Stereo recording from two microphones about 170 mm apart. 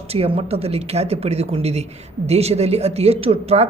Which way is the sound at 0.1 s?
35° right (ahead or behind).